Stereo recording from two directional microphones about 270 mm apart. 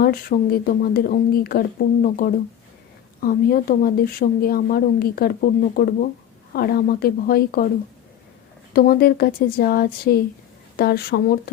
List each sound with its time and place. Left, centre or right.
0.0 s speech: left
8.7 s speech: left